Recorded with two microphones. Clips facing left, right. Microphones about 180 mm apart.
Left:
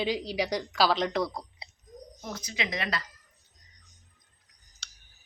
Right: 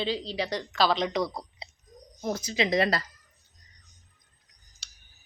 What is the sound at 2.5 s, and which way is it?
Speech, 35° right (ahead or behind).